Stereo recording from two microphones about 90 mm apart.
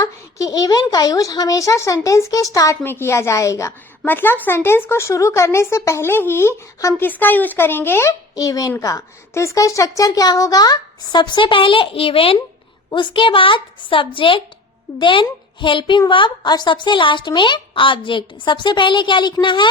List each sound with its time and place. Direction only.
0.0 s speech: 40° left (ahead or behind)
2.8 s speech: 25° left (ahead or behind)
4.0 s speech: 25° left (ahead or behind)
7.1 s speech: 20° left (ahead or behind)
8.4 s speech: 40° left (ahead or behind); by 12.4 s 90° left
12.9 s a woman's voice: 65° left (ahead or behind)